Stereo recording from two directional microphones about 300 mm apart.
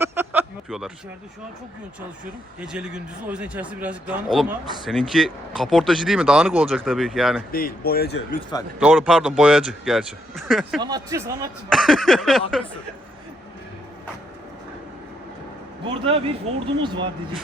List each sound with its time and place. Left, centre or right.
0.0 s a sound: centre
2.6 s a man's voice: centre
7.5 s speech: left
8.8 s a man's voice: centre
10.8 s speech: centre
11.7 s a man's voice: centre
15.8 s a man's voice: centre